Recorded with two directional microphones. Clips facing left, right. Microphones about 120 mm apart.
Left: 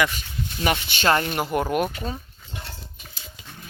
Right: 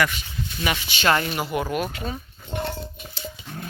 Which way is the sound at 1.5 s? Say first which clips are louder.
Left 3 dB; 50° left (ahead or behind).